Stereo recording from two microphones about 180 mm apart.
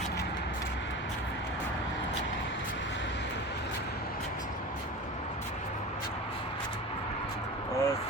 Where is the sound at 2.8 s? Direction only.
90° left.